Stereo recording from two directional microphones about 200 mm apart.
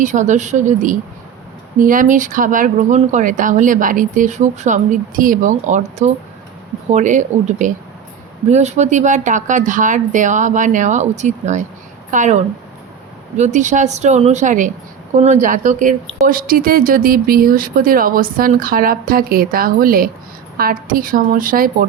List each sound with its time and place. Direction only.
0.0 s speech: 40° right (ahead or behind)